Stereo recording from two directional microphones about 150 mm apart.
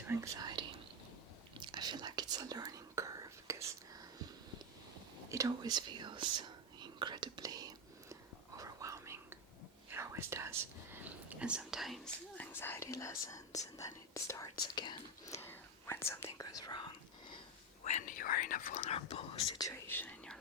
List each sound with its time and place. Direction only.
0.1 s speech: 20° right (ahead or behind)
1.5 s whispering: 30° right (ahead or behind)
5.3 s whispering: 25° right (ahead or behind); by 11.9 s centre (ahead or behind)
12.4 s whispering: 15° left (ahead or behind); by 16.9 s 30° left (ahead or behind)
17.8 s whispering: 55° left (ahead or behind)
19.5 s whispering: 20° left (ahead or behind)